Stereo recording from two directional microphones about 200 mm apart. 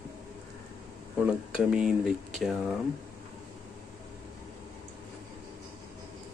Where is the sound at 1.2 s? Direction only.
5° right (ahead or behind).